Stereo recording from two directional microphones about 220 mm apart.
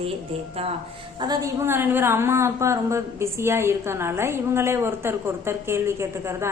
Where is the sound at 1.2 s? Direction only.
15° right (ahead or behind).